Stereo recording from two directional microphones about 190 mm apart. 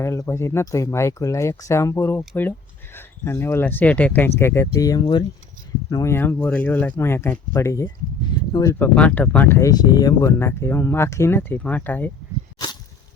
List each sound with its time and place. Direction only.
0.0 s speech: 15° left (ahead or behind)
8.8 s speech: 10° left (ahead or behind)
12.6 s a sound: 20° left (ahead or behind)